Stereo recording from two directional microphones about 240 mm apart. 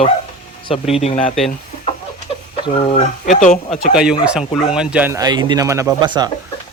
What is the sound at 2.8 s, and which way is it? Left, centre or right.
Speech, left.